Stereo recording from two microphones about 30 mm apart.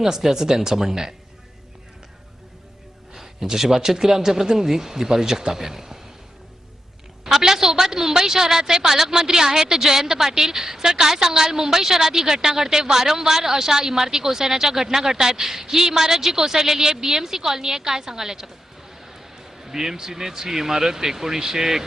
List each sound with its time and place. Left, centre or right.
0.0 s a woman's voice: centre
3.2 s a woman's voice: centre
7.3 s a woman's voice: centre
19.6 s a woman's voice: centre